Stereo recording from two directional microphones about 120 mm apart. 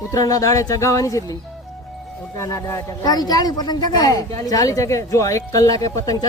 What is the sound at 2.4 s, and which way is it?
Speech, 25° left (ahead or behind).